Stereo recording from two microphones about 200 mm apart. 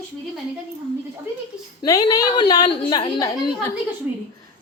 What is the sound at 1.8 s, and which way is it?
Speech, 20° left (ahead or behind).